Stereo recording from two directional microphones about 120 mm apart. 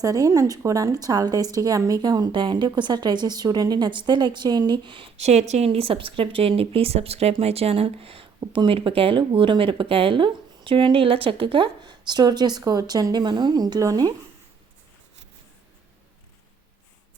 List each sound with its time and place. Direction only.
0.0 s a woman's voice: 30° right (ahead or behind)
5.1 s speech: 65° right (ahead or behind); by 14.1 s 30° right (ahead or behind)